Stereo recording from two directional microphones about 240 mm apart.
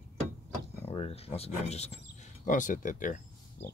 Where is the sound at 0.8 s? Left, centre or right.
Left.